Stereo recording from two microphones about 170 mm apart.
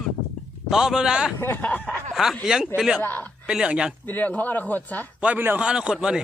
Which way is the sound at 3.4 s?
5° right (ahead or behind).